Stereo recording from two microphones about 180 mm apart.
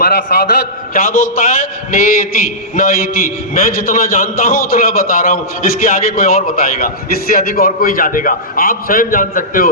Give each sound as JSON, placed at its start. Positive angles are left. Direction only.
{"t": 0.0, "sound": "a man's voice", "side_deg": 55}